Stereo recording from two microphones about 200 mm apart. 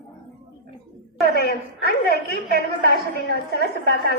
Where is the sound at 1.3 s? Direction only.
50° left (ahead or behind).